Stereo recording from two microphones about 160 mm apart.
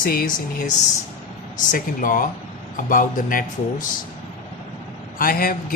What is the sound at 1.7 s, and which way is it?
Speech, 60° left (ahead or behind).